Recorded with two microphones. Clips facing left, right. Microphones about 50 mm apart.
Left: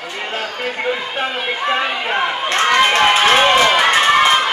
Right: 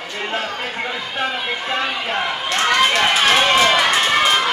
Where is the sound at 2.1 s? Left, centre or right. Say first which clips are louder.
Left 4 dB; left.